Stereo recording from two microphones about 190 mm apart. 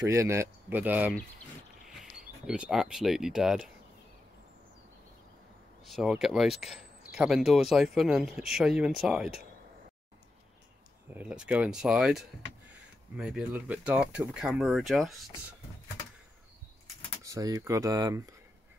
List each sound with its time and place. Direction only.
0.1 s speech: 15° right (ahead or behind)
5.9 s speech: centre (ahead or behind)
11.1 s speech: 5° right (ahead or behind)
17.2 s speech: 15° right (ahead or behind)